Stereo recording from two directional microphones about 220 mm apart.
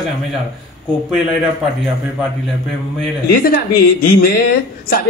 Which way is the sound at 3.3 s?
40° left (ahead or behind).